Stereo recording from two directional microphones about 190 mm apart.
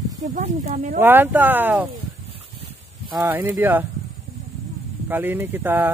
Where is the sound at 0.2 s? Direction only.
40° right (ahead or behind).